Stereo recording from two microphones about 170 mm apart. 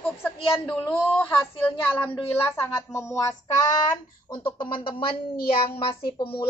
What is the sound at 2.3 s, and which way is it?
Speech, 15° left (ahead or behind).